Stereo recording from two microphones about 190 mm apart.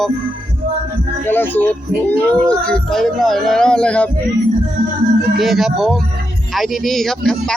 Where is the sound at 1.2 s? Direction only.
10° left (ahead or behind).